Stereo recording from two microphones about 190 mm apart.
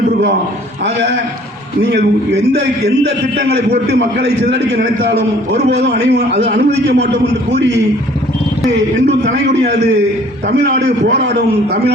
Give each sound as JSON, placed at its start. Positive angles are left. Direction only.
{"t": 1.8, "sound": "a man's voice", "side_deg": -60}